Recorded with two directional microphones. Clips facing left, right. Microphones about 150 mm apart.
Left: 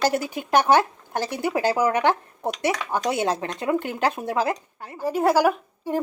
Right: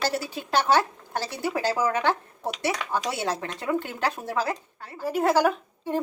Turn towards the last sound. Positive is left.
turn(degrees=10)  # may be behind; listen again after turning